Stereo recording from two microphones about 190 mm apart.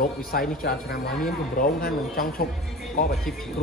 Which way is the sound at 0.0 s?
50° left (ahead or behind).